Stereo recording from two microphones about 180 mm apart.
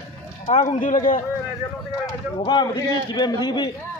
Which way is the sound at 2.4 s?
25° left (ahead or behind).